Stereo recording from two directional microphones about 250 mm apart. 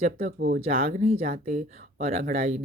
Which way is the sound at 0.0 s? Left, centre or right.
Right.